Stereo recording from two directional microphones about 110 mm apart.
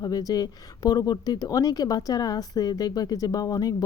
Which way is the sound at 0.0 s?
35° left (ahead or behind).